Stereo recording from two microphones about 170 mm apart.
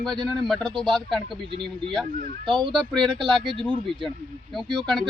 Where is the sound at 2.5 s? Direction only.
30° right (ahead or behind).